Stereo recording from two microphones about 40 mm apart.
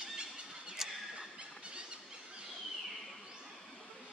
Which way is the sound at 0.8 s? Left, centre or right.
Centre.